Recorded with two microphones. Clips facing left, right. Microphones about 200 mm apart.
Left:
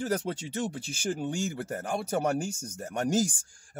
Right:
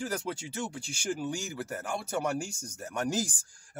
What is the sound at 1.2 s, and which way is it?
Speech, 30° left (ahead or behind).